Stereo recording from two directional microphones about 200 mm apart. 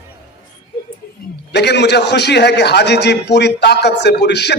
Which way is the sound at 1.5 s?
55° left (ahead or behind).